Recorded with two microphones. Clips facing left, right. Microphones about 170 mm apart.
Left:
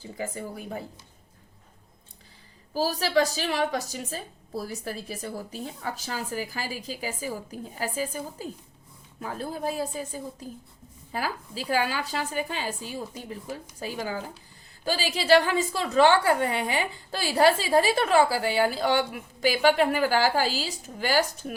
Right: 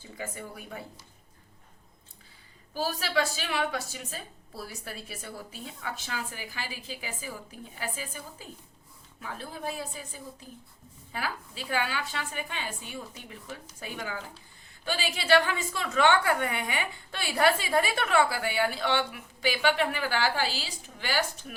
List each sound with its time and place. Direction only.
0.2 s a woman's voice: 35° left (ahead or behind)
2.7 s a woman's voice: 35° left (ahead or behind)